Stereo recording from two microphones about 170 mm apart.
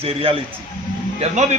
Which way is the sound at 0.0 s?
35° right (ahead or behind).